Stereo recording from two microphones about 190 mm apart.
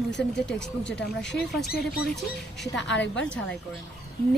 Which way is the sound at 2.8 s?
70° left (ahead or behind).